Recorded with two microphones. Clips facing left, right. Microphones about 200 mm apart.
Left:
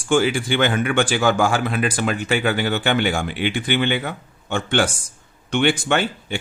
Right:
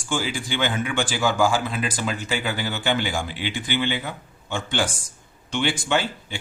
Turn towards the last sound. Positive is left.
turn(degrees=65)  # may be behind; listen again after turning